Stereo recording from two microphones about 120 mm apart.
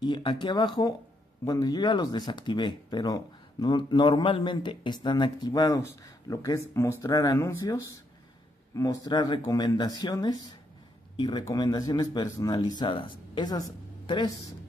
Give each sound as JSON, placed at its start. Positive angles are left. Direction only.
{"t": 0.0, "sound": "speech", "side_deg": 40}